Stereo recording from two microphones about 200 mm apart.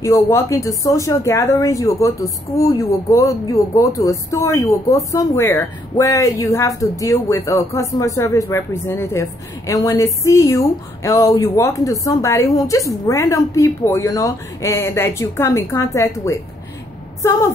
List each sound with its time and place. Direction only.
0.0 s a woman's voice: 15° left (ahead or behind)